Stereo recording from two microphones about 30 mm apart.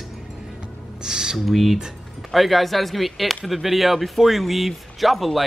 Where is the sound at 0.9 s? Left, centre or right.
Right.